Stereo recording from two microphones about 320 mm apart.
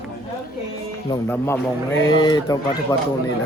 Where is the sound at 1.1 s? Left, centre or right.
Centre.